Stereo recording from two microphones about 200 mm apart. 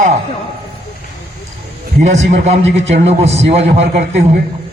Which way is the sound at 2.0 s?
40° right (ahead or behind).